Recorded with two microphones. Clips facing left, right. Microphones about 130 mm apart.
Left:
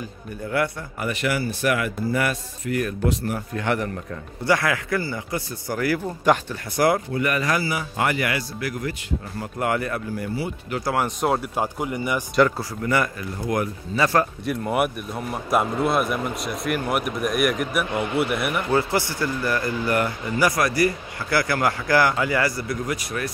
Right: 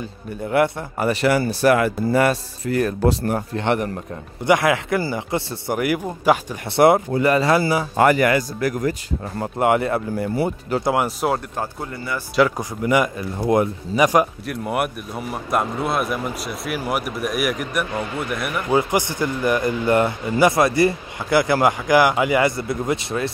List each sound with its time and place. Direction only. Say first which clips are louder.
0.5 s speech: right 6 dB; 25° right (ahead or behind)
3.5 s speech: right 3 dB; 25° right (ahead or behind)
6.7 s speech: right 6 dB; 25° right (ahead or behind)
7.9 s speech: right 9 dB; 45° right (ahead or behind)
9.6 s speech: right 6 dB; 25° right (ahead or behind)
11.1 s a man's voice: right 1 dB; centre (ahead or behind)
11.5 s speech: left 3 dB; 15° left (ahead or behind)
12.5 s speech: right 4 dB; 15° right (ahead or behind)
14.4 s a man's voice: left 1 dB; centre (ahead or behind)
18.7 s speech: right 5 dB; 15° right (ahead or behind)